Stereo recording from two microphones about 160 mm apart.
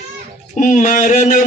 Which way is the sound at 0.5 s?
50° left (ahead or behind).